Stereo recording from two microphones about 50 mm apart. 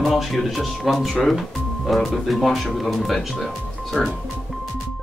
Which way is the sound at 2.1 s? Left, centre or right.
Centre.